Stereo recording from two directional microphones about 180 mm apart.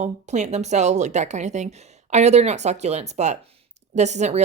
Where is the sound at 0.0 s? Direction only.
40° right (ahead or behind).